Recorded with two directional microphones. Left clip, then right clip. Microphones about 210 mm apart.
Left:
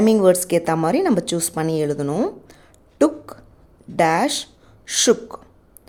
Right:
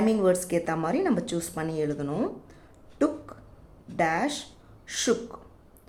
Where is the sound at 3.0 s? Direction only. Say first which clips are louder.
Left 9 dB; 40° left (ahead or behind).